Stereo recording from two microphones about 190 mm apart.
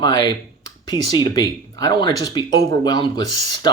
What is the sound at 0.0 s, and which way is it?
Speech, 20° left (ahead or behind).